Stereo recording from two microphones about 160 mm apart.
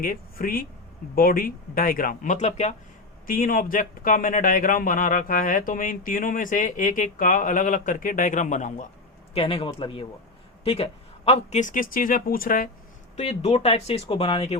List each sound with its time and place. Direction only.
0.0 s speech: 60° left (ahead or behind); by 2.7 s 45° left (ahead or behind)
3.2 s speech: 60° left (ahead or behind)
9.3 s speech: 35° left (ahead or behind); by 12.7 s 60° left (ahead or behind)
13.1 s speech: 40° left (ahead or behind)